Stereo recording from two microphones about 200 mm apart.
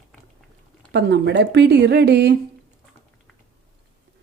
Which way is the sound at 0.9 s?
60° right (ahead or behind).